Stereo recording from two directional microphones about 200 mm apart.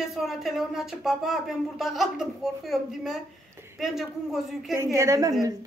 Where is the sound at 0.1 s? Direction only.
Centre (ahead or behind).